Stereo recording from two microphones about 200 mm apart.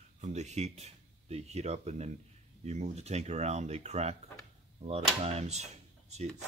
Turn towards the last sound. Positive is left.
turn(degrees=-35)  # may be behind; listen again after turning